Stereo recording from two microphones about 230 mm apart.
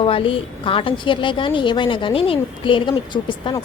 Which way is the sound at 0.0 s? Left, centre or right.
Left.